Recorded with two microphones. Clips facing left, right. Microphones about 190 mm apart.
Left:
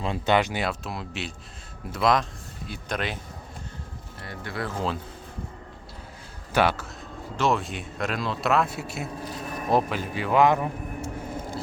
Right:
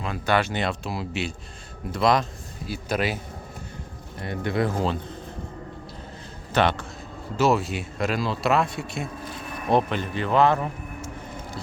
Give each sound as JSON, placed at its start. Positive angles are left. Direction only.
{"t": 0.0, "sound": "speech", "side_deg": 25}
{"t": 0.6, "sound": "speech", "side_deg": 0}
{"t": 4.2, "sound": "speech", "side_deg": -20}
{"t": 6.5, "sound": "speech", "side_deg": 10}
{"t": 7.3, "sound": "speech", "side_deg": -5}
{"t": 9.3, "sound": "a sound", "side_deg": 40}
{"t": 9.6, "sound": "a man's voice", "side_deg": 5}